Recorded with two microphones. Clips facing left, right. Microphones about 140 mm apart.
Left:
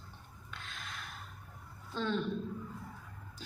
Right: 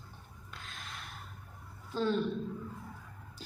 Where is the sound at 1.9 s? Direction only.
40° right (ahead or behind).